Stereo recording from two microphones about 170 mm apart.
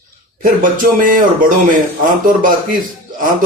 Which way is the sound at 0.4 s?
55° right (ahead or behind).